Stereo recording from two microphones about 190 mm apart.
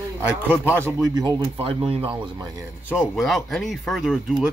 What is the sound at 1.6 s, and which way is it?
Speech, 30° right (ahead or behind).